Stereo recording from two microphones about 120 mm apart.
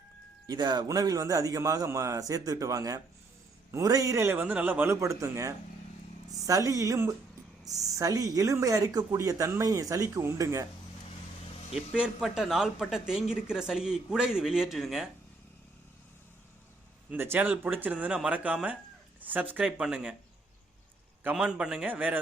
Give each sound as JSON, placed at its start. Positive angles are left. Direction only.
{"t": 0.4, "sound": "speech", "side_deg": -35}
{"t": 11.9, "sound": "speech", "side_deg": -5}
{"t": 17.1, "sound": "speech", "side_deg": -15}
{"t": 21.2, "sound": "speech", "side_deg": -5}